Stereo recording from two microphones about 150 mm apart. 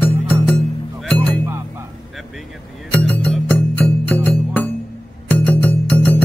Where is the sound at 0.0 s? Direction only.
10° left (ahead or behind).